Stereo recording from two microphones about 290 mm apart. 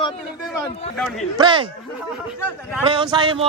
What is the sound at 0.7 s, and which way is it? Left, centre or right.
Speech, left.